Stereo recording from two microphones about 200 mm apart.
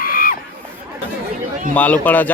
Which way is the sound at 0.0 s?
45° left (ahead or behind).